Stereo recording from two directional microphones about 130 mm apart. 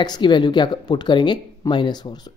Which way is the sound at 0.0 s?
35° left (ahead or behind).